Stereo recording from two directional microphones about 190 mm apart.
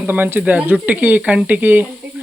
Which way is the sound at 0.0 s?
10° right (ahead or behind).